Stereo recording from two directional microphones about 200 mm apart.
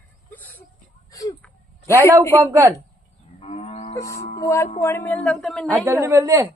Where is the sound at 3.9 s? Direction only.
15° left (ahead or behind).